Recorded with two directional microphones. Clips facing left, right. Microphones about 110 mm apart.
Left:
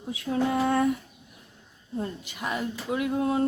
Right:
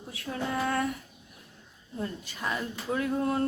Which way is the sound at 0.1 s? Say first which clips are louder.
Left 7 dB; 25° left (ahead or behind).